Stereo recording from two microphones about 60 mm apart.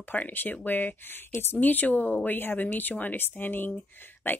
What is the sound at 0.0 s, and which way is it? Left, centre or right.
Speech, left.